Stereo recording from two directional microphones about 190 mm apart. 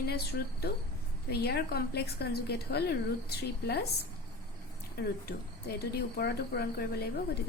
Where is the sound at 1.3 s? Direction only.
55° left (ahead or behind).